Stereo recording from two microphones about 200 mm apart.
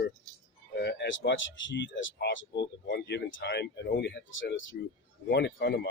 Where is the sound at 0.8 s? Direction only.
60° left (ahead or behind).